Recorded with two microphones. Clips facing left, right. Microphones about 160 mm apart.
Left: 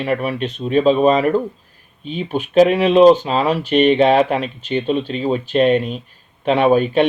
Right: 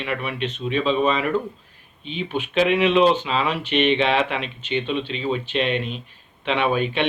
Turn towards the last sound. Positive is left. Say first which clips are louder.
# left 8 dB
turn(degrees=40)  # may be behind; listen again after turning